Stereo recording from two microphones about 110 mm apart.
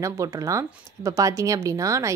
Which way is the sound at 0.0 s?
30° right (ahead or behind).